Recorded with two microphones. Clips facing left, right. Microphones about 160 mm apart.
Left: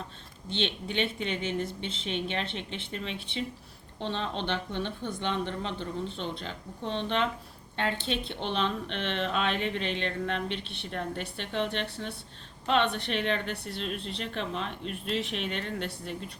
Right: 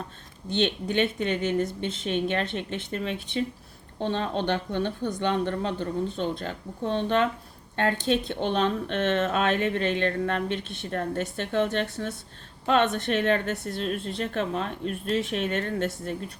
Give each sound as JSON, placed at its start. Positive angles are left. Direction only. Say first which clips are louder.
{"t": 0.5, "sound": "speech", "louder": "right 6 dB", "side_deg": -45}